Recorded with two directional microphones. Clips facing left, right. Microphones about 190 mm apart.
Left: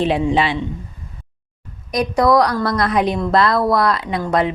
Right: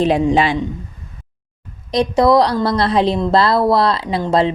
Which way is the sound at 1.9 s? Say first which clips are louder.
Right 2 dB; 25° right (ahead or behind).